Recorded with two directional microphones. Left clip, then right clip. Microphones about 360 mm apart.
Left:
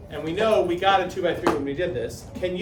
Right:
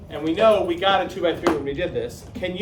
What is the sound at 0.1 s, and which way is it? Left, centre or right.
A man's voice, centre.